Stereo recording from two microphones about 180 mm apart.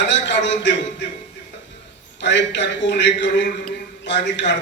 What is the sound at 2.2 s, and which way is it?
A man's voice, 80° left.